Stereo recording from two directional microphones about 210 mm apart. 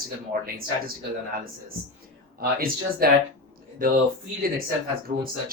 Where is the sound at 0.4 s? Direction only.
45° right (ahead or behind).